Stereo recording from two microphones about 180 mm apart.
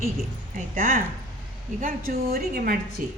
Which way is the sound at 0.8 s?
50° right (ahead or behind).